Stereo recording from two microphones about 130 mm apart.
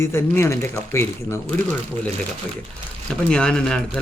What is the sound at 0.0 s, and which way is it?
Speech, 20° left (ahead or behind).